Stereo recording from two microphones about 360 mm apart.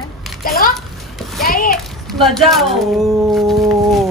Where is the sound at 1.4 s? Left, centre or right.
Left.